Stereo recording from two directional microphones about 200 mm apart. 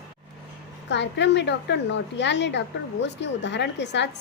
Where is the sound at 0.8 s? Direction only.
60° left (ahead or behind).